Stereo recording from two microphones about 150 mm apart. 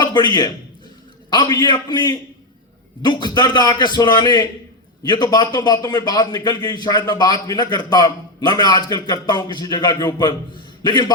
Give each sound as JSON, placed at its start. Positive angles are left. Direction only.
{"t": 0.0, "sound": "a man's voice", "side_deg": 30}